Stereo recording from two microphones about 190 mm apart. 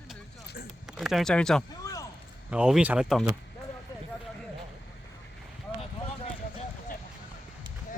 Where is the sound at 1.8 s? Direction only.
15° left (ahead or behind).